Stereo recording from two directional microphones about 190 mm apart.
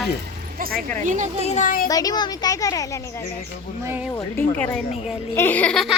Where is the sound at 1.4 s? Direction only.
35° left (ahead or behind).